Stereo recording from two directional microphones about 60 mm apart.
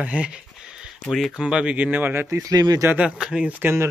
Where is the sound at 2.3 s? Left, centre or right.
Right.